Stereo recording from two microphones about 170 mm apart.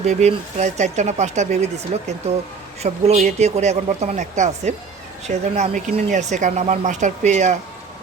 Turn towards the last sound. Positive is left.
turn(degrees=-45)  # may be behind; listen again after turning